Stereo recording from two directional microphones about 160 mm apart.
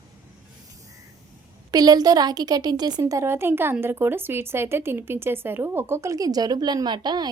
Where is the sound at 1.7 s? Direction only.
25° right (ahead or behind).